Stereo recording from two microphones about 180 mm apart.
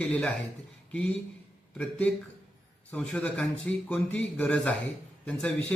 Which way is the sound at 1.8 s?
5° left (ahead or behind).